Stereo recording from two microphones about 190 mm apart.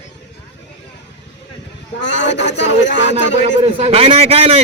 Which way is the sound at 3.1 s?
35° right (ahead or behind).